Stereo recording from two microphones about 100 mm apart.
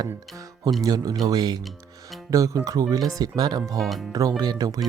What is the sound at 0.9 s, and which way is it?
Speech, 40° right (ahead or behind).